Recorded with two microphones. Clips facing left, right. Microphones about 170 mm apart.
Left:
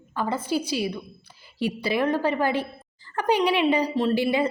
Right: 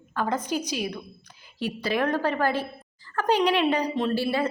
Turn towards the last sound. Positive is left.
turn(degrees=15)  # may be behind; listen again after turning